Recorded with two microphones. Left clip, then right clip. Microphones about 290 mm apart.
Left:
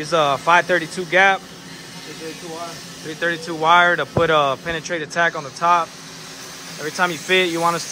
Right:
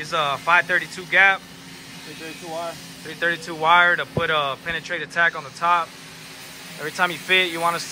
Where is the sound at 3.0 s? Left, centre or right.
Centre.